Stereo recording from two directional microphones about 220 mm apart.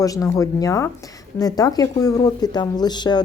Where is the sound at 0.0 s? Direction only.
15° left (ahead or behind).